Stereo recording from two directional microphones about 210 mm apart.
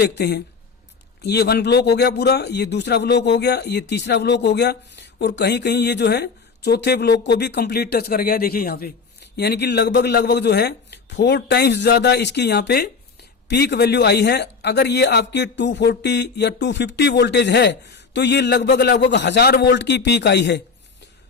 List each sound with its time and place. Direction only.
0.0 s speech: 50° left (ahead or behind)